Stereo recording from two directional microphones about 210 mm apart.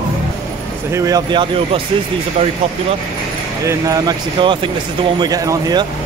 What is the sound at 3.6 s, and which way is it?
Speech, 15° right (ahead or behind).